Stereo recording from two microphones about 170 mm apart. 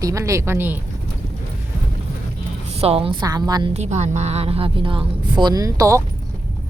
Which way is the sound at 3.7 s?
40° right (ahead or behind).